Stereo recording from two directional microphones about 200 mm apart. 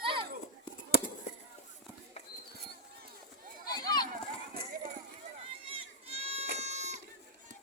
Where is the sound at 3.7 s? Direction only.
20° left (ahead or behind).